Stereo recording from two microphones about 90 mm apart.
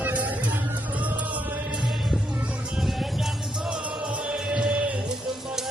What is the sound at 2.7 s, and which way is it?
Music, 5° right (ahead or behind).